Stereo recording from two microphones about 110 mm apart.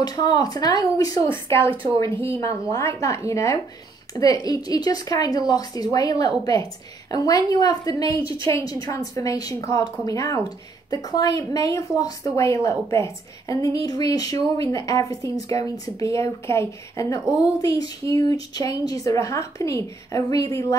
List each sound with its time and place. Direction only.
0.0 s a woman's voice: 35° left (ahead or behind)
1.3 s a woman's voice: 25° left (ahead or behind)